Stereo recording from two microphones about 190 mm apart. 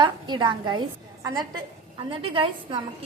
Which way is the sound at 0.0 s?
25° right (ahead or behind).